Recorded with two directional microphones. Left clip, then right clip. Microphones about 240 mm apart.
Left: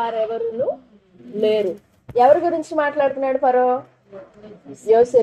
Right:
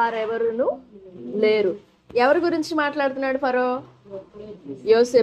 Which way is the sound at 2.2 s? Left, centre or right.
Right.